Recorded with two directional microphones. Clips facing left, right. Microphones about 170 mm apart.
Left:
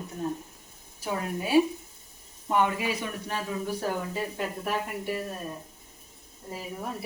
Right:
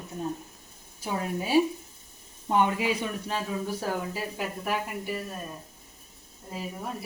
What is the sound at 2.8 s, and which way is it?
Speech, 20° right (ahead or behind).